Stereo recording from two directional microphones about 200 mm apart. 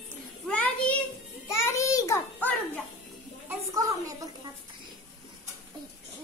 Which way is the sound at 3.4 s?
15° right (ahead or behind).